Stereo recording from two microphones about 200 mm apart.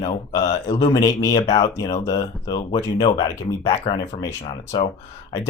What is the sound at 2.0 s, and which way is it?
Speech, 20° left (ahead or behind).